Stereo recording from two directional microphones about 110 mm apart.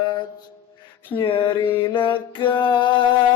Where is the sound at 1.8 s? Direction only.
50° left (ahead or behind).